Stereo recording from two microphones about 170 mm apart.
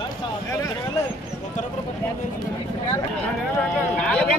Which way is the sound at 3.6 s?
5° left (ahead or behind).